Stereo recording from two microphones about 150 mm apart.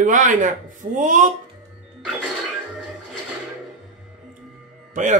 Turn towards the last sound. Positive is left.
turn(degrees=-55)  # may be behind; listen again after turning